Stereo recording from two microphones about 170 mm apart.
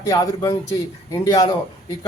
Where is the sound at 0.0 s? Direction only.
20° left (ahead or behind).